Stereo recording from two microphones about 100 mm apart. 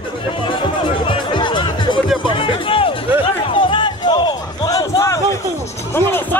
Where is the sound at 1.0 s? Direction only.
55° left (ahead or behind); by 5.2 s 35° left (ahead or behind).